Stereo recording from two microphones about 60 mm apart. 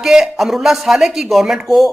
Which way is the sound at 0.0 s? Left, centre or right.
Centre.